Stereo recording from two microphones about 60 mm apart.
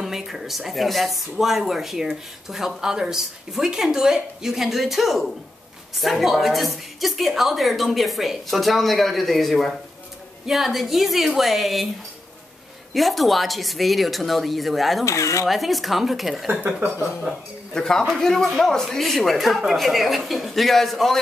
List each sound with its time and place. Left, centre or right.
0.0 s speech: centre
12.9 s speech: centre
15.0 s speech: left
15.4 s speech: centre
16.4 s speech: right
17.3 s speech: centre
17.7 s speech: centre